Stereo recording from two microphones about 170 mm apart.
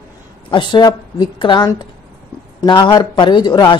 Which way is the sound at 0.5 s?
30° left (ahead or behind).